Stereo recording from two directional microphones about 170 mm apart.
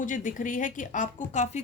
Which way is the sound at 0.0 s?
50° left (ahead or behind).